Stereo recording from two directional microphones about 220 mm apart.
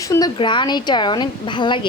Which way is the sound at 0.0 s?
15° left (ahead or behind).